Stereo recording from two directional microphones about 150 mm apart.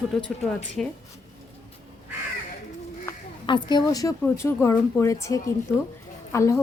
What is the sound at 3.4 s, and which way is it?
Speech, 30° left (ahead or behind).